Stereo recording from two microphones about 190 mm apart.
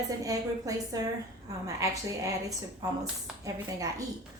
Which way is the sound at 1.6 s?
15° right (ahead or behind).